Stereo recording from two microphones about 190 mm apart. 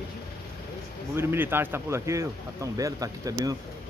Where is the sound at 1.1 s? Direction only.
10° right (ahead or behind).